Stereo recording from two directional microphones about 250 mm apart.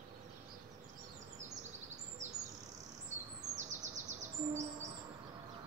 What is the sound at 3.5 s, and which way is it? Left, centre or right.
Bird, right.